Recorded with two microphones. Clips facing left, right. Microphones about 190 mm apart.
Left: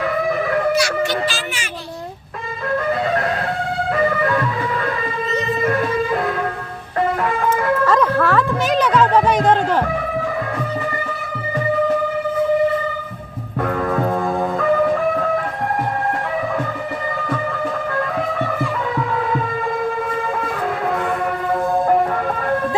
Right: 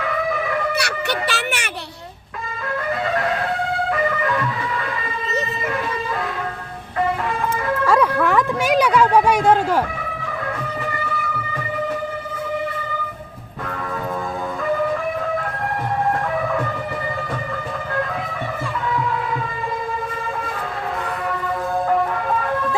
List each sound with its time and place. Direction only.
0.8 s speech: 65° right (ahead or behind)
7.9 s music: 10° right (ahead or behind)